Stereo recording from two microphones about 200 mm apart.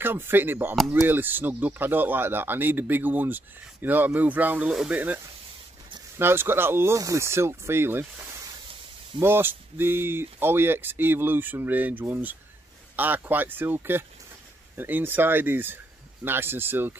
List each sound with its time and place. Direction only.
0.0 s speech: 10° right (ahead or behind)